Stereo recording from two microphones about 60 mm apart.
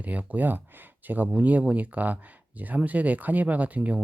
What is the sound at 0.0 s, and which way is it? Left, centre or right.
Speech, right.